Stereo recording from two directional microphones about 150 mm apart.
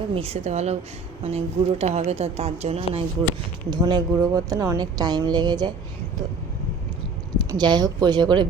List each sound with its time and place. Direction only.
0.1 s speech: 40° right (ahead or behind)
3.7 s speech: 30° right (ahead or behind)
7.3 s speech: 30° right (ahead or behind)